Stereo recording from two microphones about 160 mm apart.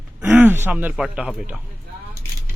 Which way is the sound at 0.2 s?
10° right (ahead or behind).